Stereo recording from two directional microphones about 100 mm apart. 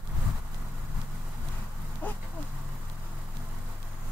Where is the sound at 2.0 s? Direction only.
15° left (ahead or behind).